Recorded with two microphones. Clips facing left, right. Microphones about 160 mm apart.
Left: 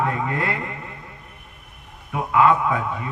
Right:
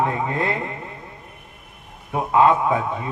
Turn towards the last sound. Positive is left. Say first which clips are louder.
# right 2 dB
turn(degrees=-25)  # may be behind; listen again after turning